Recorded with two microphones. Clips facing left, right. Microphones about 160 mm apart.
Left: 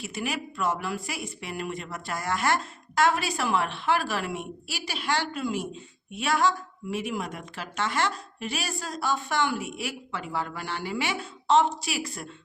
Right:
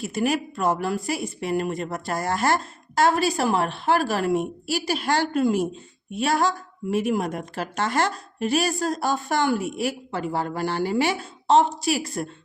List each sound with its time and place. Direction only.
0.0 s speech: 40° right (ahead or behind)